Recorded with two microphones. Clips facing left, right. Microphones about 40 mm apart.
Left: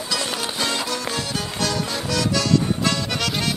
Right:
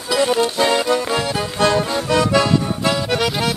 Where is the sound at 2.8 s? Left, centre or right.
Centre.